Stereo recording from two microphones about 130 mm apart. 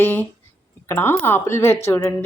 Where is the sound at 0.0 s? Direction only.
15° left (ahead or behind).